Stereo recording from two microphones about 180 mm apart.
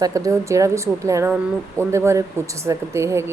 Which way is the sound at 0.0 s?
20° right (ahead or behind).